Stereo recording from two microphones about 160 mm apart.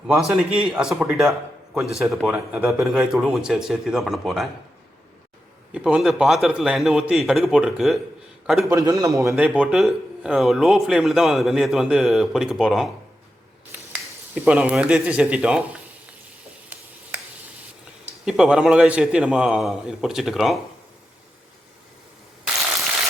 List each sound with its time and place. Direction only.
0.1 s a man's voice: centre (ahead or behind)
5.7 s a man's voice: 5° right (ahead or behind)
8.7 s a man's voice: 20° right (ahead or behind)
9.3 s a man's voice: 5° right (ahead or behind)
14.4 s speech: 10° right (ahead or behind)
16.7 s a sound: 10° right (ahead or behind)
18.0 s a man's voice: 5° right (ahead or behind)